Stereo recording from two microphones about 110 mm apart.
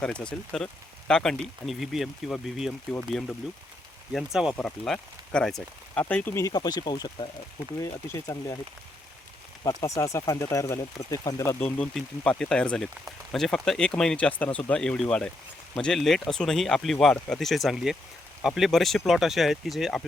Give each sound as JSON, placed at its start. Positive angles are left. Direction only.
{"t": 0.0, "sound": "speech", "side_deg": 10}
{"t": 4.1, "sound": "speech", "side_deg": -5}
{"t": 4.5, "sound": "speech", "side_deg": 10}
{"t": 6.4, "sound": "speech", "side_deg": 35}
{"t": 7.8, "sound": "speech", "side_deg": 25}
{"t": 9.6, "sound": "speech", "side_deg": 30}
{"t": 11.9, "sound": "speech", "side_deg": 5}